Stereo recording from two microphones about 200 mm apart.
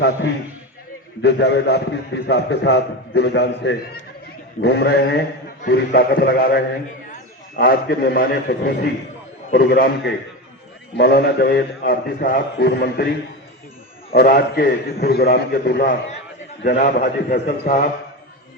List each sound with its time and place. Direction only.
1.2 s a man's voice: 55° left (ahead or behind)